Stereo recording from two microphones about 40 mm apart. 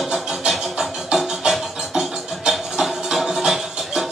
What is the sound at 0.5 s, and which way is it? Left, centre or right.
Music, centre.